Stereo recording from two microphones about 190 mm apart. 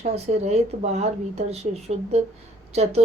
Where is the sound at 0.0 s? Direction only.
35° right (ahead or behind).